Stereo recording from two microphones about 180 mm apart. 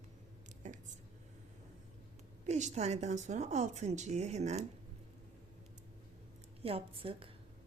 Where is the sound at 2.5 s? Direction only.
40° right (ahead or behind).